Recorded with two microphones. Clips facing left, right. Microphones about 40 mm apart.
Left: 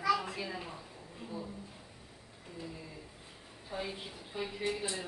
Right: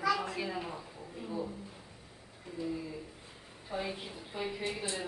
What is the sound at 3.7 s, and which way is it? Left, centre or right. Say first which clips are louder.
Speech: right 2 dB; centre.